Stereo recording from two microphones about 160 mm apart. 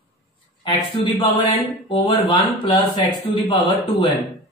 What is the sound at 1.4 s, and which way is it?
Speech, 35° left (ahead or behind).